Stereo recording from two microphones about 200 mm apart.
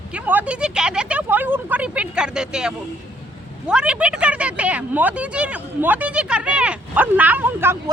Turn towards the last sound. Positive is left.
turn(degrees=-10)  # may be behind; listen again after turning